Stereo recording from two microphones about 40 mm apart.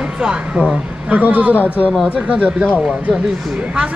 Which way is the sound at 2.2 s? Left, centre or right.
Right.